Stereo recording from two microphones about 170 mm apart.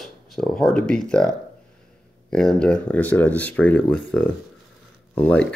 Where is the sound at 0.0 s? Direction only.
Centre (ahead or behind).